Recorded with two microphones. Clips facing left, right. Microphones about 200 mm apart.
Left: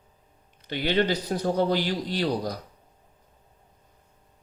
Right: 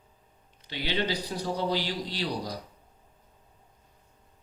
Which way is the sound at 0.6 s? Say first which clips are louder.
Left 6 dB; 50° left (ahead or behind).